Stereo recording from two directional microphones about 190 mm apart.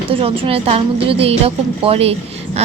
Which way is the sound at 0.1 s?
30° right (ahead or behind).